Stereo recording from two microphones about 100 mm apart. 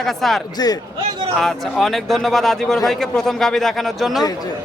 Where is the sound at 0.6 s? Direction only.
40° left (ahead or behind).